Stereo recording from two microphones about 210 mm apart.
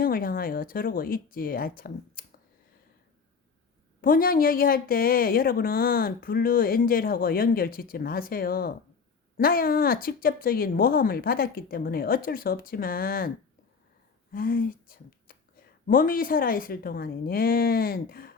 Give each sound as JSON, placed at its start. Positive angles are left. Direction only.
{"t": 0.0, "sound": "a woman's voice", "side_deg": 45}
{"t": 4.0, "sound": "a woman's voice", "side_deg": 45}
{"t": 14.3, "sound": "a woman's voice", "side_deg": 40}